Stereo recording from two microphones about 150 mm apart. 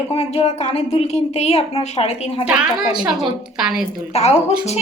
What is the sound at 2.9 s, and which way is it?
Speech, 5° right (ahead or behind).